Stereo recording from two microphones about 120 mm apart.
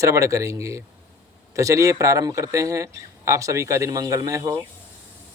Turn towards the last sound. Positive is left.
turn(degrees=-30)  # may be behind; listen again after turning